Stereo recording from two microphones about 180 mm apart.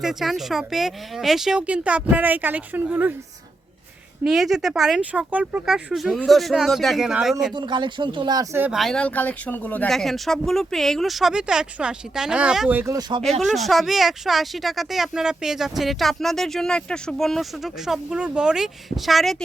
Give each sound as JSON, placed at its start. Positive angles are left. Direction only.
{"t": 0.0, "sound": "speech", "side_deg": 0}
{"t": 4.2, "sound": "speech", "side_deg": 0}
{"t": 7.5, "sound": "speech", "side_deg": -25}
{"t": 8.8, "sound": "speech", "side_deg": 5}
{"t": 13.4, "sound": "speech", "side_deg": 0}